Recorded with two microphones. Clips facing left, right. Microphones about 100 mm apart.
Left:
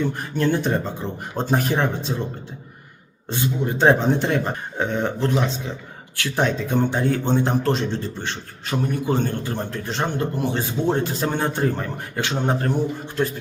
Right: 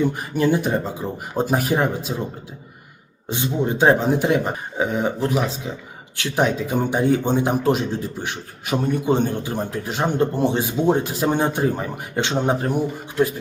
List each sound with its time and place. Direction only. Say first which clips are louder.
0.0 s speech: right 2 dB; 10° right (ahead or behind)
3.2 s speech: right 2 dB; 20° right (ahead or behind)
3.8 s speech: even; centre (ahead or behind)
6.1 s speech: right 1 dB; 20° right (ahead or behind)
6.4 s speech: right 1 dB; 10° right (ahead or behind)
10.2 s speech: right 4 dB; 25° right (ahead or behind)
10.6 s speech: right 3 dB; 15° right (ahead or behind)
12.1 s speech: right 3 dB; 20° right (ahead or behind)